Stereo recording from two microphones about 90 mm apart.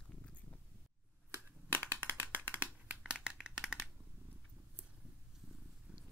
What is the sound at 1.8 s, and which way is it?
Rattle, 25° right (ahead or behind).